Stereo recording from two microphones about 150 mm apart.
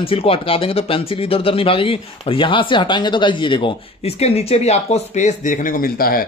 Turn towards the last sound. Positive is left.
turn(degrees=75)  # may be behind; listen again after turning